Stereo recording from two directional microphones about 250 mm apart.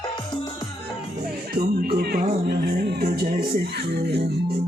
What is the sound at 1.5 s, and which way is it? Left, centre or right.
Music, right.